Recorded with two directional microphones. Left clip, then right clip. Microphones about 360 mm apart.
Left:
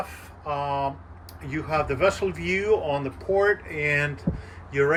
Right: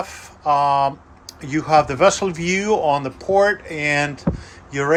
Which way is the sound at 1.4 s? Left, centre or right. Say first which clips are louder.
Right 10 dB; centre.